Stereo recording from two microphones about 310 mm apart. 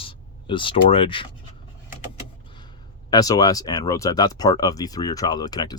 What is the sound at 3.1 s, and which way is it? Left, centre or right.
Speech, centre.